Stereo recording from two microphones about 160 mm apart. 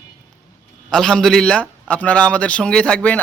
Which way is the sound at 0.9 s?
5° left (ahead or behind).